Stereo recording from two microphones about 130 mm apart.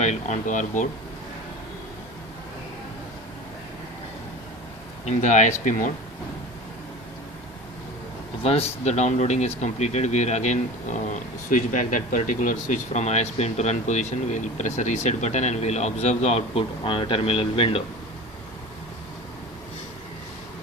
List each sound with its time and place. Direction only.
0.0 s speech: 65° left (ahead or behind)
5.0 s speech: 70° left (ahead or behind)
8.4 s speech: 50° left (ahead or behind)